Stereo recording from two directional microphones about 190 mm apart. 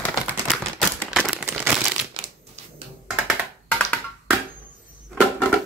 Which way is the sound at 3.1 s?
Centre (ahead or behind).